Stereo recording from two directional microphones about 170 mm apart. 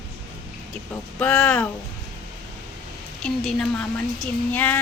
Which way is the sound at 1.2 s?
10° left (ahead or behind).